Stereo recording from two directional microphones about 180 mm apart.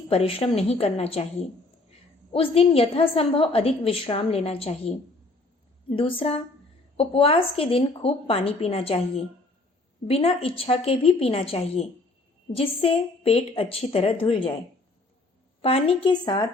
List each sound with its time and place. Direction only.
0.1 s a woman's voice: 35° left (ahead or behind)
2.3 s a woman's voice: 30° left (ahead or behind)
15.6 s a woman's voice: 35° left (ahead or behind)